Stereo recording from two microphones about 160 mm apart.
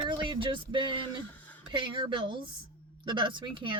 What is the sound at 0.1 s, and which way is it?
Speech, 30° right (ahead or behind).